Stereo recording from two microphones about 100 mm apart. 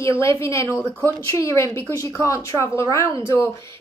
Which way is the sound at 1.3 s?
30° left (ahead or behind).